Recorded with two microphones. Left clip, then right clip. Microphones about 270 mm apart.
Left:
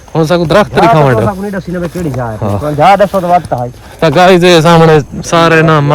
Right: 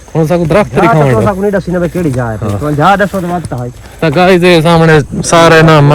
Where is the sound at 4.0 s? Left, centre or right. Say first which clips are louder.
Left 2 dB; left.